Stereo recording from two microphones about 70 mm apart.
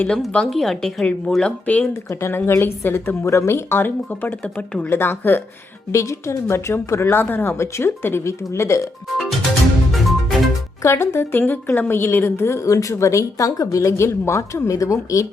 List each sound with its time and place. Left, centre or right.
0.3 s a woman's voice: centre
1.6 s speech: left
2.0 s speech: left; by 4.9 s centre
4.9 s speech: left
5.9 s speech: left
7.5 s speech: left
9.9 s music: centre
10.8 s a woman's voice: left